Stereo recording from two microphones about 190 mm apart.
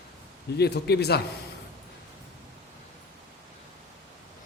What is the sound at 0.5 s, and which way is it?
Speech, 60° left (ahead or behind).